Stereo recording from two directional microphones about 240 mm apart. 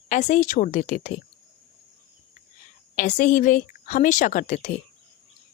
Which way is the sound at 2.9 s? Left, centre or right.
Left.